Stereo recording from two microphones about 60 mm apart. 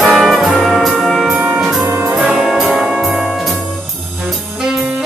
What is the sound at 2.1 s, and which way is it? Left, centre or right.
Brass instrument, centre.